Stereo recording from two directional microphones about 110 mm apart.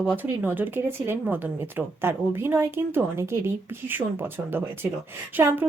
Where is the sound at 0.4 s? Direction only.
15° right (ahead or behind).